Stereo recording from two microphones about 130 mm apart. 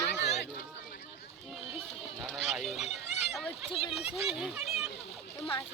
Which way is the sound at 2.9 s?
55° left (ahead or behind).